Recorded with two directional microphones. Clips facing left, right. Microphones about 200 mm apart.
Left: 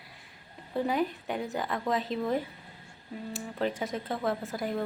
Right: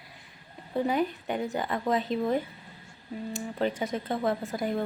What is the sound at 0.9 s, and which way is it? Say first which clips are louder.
Speech: right 2 dB; centre (ahead or behind).